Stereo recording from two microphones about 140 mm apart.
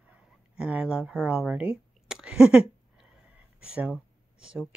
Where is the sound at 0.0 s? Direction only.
10° right (ahead or behind).